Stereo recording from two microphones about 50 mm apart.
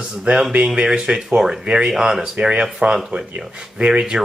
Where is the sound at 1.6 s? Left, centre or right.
Centre.